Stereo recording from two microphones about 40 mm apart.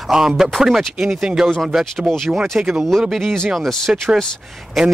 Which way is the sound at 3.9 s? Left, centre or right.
Right.